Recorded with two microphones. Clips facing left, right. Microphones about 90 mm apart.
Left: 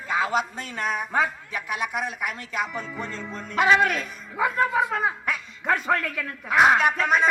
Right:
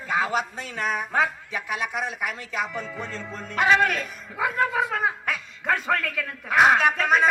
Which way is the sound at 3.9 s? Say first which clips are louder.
Even; 30° left (ahead or behind).